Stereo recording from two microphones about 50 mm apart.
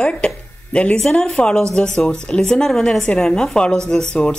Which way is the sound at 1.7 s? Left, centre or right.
Centre.